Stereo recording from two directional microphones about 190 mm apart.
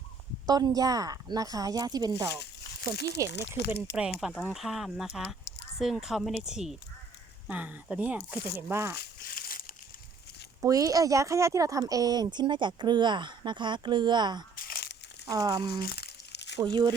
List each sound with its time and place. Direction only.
0.4 s speech: 20° right (ahead or behind)
2.9 s speech: 60° left (ahead or behind)
3.9 s speech: 5° right (ahead or behind)
9.0 s crumpling: 55° left (ahead or behind)
10.6 s speech: 20° right (ahead or behind)
14.5 s a sound: 50° left (ahead or behind)
15.3 s speech: 20° right (ahead or behind)
15.9 s crumpling: 60° left (ahead or behind)